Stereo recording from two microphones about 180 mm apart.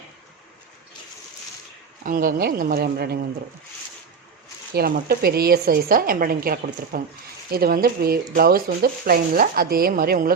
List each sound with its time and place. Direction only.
2.0 s speech: 55° right (ahead or behind)
4.7 s speech: 55° right (ahead or behind)